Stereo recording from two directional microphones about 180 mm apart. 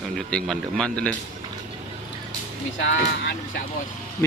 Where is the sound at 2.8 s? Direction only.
80° left.